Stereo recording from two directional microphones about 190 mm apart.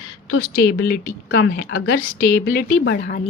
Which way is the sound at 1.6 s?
90° left.